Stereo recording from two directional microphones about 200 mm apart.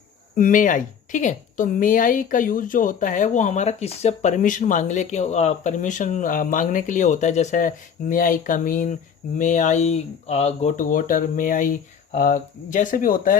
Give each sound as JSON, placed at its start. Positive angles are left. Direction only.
{"t": 0.3, "sound": "a woman's voice", "side_deg": 40}